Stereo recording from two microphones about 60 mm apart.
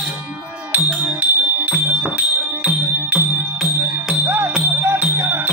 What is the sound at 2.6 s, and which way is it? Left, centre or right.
Music, centre.